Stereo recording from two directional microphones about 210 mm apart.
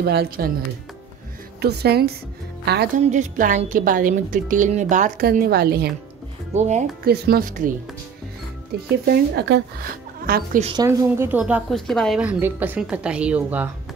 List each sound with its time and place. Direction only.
0.0 s a woman's voice: 50° right (ahead or behind)
1.6 s a woman's voice: 50° right (ahead or behind)
3.0 s a woman's voice: 35° right (ahead or behind)
6.5 s a woman's voice: 35° right (ahead or behind)
7.1 s a woman's voice: 45° right (ahead or behind)
9.0 s a woman's voice: 50° right (ahead or behind)
10.8 s a woman's voice: 10° right (ahead or behind)